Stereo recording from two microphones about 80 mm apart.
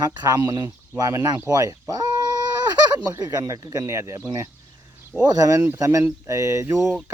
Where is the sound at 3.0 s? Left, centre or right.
Right.